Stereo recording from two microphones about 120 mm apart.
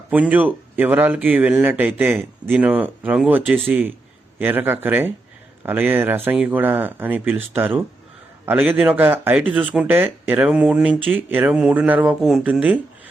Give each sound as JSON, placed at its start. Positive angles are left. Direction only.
{"t": 0.1, "sound": "speech", "side_deg": -10}